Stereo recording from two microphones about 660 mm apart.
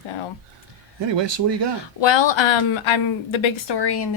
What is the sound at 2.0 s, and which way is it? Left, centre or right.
A woman's voice, left.